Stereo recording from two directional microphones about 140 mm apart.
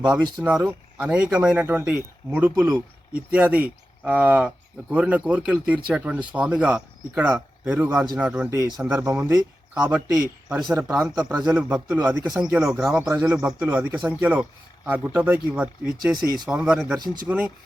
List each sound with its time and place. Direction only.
0.4 s speech: 10° right (ahead or behind)
16.1 s speech: 30° right (ahead or behind)
16.5 s speech: 5° right (ahead or behind)